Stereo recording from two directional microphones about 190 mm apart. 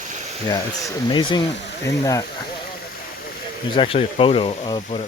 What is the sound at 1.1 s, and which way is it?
Speech, 25° left (ahead or behind).